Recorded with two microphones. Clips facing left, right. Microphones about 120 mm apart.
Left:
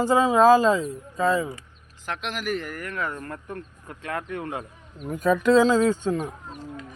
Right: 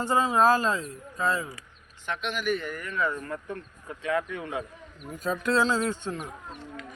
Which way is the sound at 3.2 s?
45° left (ahead or behind).